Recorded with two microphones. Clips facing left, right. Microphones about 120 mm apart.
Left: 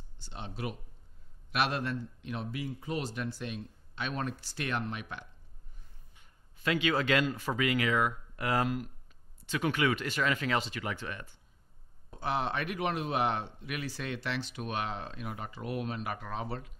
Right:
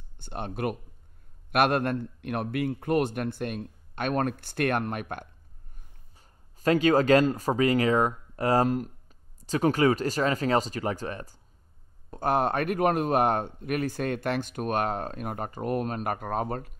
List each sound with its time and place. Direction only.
0.2 s a man's voice: 55° right (ahead or behind)
6.1 s speech: 40° right (ahead or behind)
12.1 s speech: 50° right (ahead or behind)